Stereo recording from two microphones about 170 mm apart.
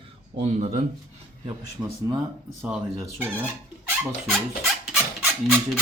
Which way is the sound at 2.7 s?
Centre (ahead or behind).